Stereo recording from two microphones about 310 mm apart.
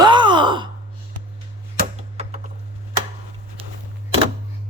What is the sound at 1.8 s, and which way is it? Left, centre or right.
Computer keyboard, right.